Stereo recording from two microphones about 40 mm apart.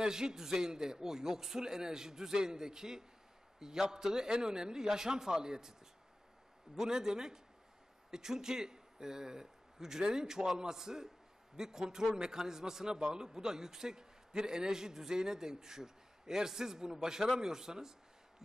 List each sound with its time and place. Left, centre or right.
0.0 s a man's voice: centre
6.8 s a man's voice: centre